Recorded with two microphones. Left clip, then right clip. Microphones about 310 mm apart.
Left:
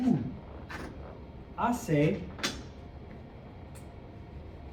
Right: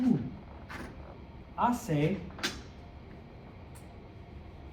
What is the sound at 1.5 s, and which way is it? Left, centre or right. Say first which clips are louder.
Speech: right 1 dB; centre.